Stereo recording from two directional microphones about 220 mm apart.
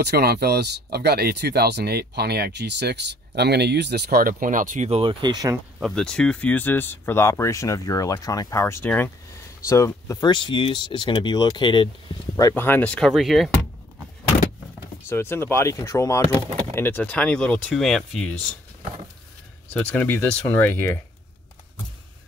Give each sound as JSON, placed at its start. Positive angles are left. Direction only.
{"t": 0.0, "sound": "speech", "side_deg": -45}
{"t": 5.8, "sound": "speech", "side_deg": 0}
{"t": 15.0, "sound": "speech", "side_deg": 10}
{"t": 19.7, "sound": "speech", "side_deg": 10}